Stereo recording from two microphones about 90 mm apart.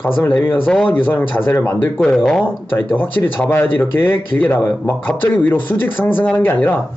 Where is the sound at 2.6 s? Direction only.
20° left (ahead or behind).